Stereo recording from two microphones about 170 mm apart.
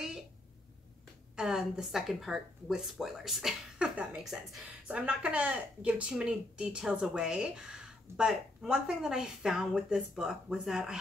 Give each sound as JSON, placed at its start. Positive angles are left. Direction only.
{"t": 1.3, "sound": "a woman's voice", "side_deg": -5}